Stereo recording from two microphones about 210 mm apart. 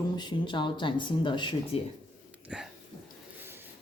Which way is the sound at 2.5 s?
5° right (ahead or behind).